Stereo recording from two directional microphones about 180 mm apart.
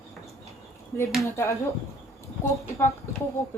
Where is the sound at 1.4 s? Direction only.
15° left (ahead or behind).